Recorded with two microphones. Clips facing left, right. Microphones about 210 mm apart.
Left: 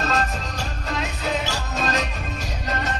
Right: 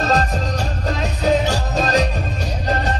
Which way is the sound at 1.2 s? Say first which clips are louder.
Right 12 dB; 35° right (ahead or behind).